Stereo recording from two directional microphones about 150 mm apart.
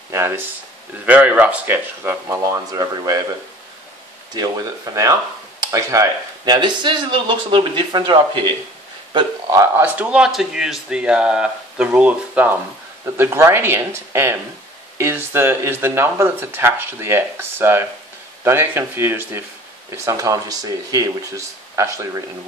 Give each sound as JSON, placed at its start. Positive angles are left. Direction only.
{"t": 0.1, "sound": "speech", "side_deg": -15}
{"t": 4.3, "sound": "speech", "side_deg": -25}
{"t": 9.5, "sound": "speech", "side_deg": -20}
{"t": 9.9, "sound": "speech", "side_deg": -5}